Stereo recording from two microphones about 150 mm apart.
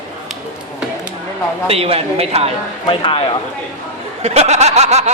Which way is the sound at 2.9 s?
35° left (ahead or behind).